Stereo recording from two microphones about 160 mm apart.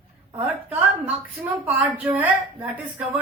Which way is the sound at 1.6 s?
10° right (ahead or behind).